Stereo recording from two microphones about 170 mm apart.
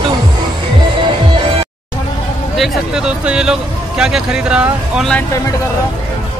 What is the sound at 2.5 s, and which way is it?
Speech, centre (ahead or behind).